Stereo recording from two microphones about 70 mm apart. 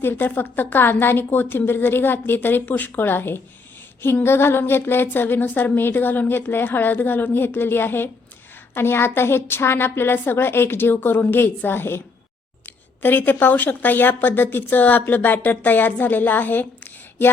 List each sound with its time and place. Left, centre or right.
0.0 s speech: left